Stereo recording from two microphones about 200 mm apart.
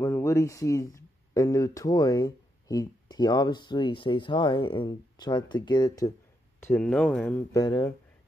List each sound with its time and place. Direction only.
0.0 s speech: 15° left (ahead or behind)
6.6 s speech: 10° left (ahead or behind)
7.5 s speech: 20° left (ahead or behind)